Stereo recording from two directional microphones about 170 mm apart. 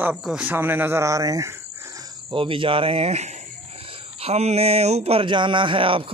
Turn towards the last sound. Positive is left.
turn(degrees=-30)  # may be behind; listen again after turning